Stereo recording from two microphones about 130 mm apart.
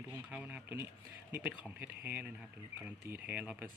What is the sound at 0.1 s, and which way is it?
Speech, 10° right (ahead or behind).